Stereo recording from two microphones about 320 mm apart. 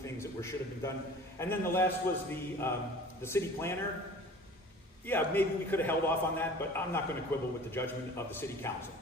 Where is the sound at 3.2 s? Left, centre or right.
Centre.